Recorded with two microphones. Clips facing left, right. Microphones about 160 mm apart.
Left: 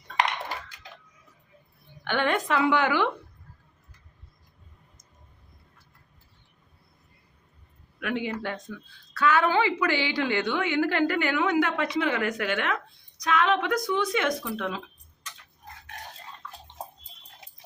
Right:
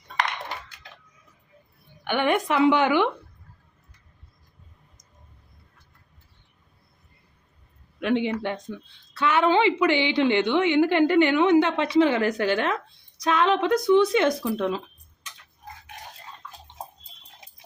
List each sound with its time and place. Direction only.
2.0 s a woman's voice: 15° right (ahead or behind)
7.9 s a woman's voice: 25° right (ahead or behind)